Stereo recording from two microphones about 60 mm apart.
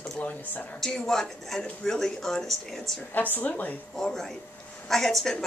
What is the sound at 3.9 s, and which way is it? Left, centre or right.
A woman's voice, centre.